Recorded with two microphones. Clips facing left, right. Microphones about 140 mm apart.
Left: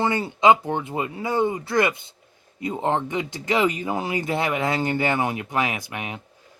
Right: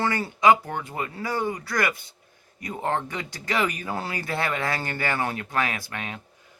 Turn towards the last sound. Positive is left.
turn(degrees=15)  # may be behind; listen again after turning